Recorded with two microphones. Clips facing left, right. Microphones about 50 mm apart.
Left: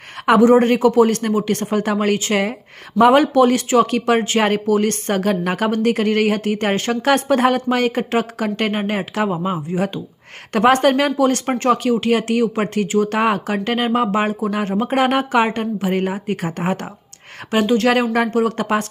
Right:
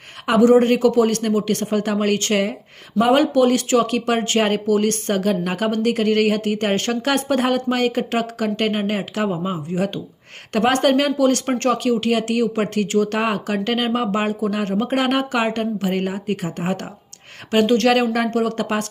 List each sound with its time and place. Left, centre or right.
0.3 s speech: left; by 9.7 s centre
9.7 s speech: left
11.4 s speech: centre
11.7 s speech: left
17.6 s speech: centre
17.8 s speech: left